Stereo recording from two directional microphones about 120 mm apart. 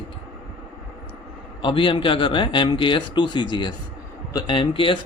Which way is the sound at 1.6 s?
45° left (ahead or behind).